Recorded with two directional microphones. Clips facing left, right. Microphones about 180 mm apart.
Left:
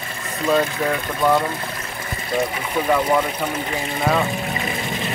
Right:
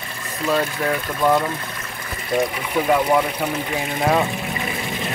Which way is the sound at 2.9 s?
5° right (ahead or behind).